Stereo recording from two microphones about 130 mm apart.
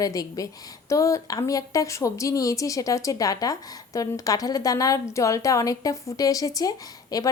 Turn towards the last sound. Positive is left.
turn(degrees=30)  # may be behind; listen again after turning